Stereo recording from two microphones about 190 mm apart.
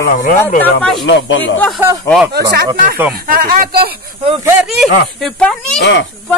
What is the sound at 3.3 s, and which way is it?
Speech, 50° right (ahead or behind).